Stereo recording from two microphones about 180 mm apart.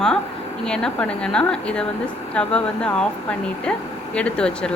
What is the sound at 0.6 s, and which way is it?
A woman's voice, 5° left (ahead or behind).